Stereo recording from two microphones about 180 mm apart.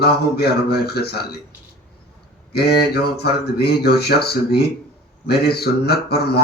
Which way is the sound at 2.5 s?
60° left (ahead or behind).